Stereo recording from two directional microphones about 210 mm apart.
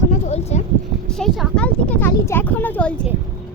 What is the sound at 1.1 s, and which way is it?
Speech, centre (ahead or behind).